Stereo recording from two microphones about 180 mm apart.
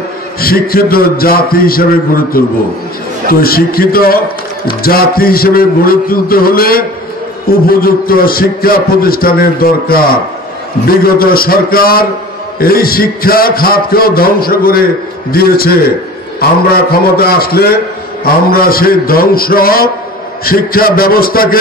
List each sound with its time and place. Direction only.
0.4 s a man's voice: 55° left (ahead or behind)